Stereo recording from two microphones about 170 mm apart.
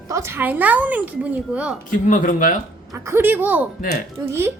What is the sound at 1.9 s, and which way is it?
Speech, 50° left (ahead or behind).